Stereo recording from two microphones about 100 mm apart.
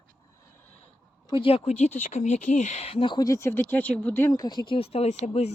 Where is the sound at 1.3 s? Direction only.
65° left (ahead or behind); by 1.7 s 80° left.